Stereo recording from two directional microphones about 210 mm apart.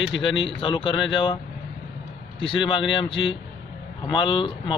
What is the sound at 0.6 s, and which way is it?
Speech, 25° left (ahead or behind).